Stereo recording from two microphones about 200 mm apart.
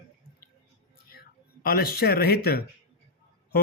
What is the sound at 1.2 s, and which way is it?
Speech, 50° left (ahead or behind).